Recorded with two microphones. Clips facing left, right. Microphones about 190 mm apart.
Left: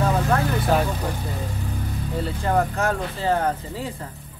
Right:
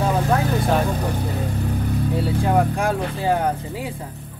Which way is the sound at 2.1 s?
10° right (ahead or behind).